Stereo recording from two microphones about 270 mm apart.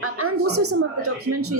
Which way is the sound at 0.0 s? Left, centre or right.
Right.